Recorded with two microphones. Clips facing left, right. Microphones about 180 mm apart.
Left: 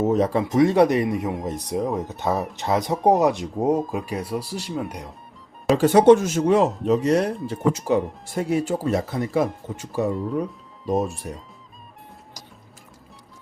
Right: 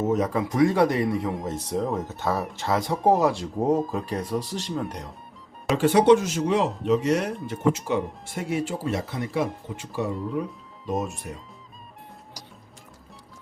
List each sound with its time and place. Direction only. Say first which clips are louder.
0.1 s speech: left 4 dB; 30° left (ahead or behind); by 5.0 s 5° left (ahead or behind)
5.7 s speech: left 4 dB; 45° left (ahead or behind)